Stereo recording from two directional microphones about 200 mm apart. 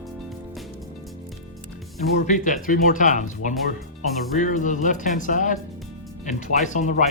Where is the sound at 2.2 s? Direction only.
40° left (ahead or behind).